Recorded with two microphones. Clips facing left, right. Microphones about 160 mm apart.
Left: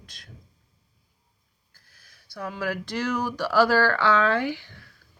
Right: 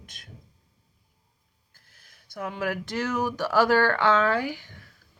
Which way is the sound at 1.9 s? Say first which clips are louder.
Even; 20° right (ahead or behind).